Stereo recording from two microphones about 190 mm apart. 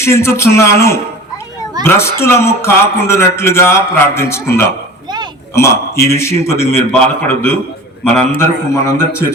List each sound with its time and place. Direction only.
0.0 s speech: 15° left (ahead or behind)
8.7 s speech: 15° left (ahead or behind)